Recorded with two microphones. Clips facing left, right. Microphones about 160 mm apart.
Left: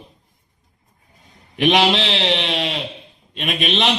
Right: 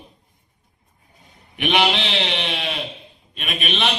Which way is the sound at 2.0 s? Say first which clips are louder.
Left 4 dB; 80° left.